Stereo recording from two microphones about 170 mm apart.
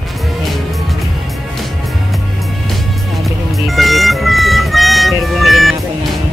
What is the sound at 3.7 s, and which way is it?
Music, centre (ahead or behind).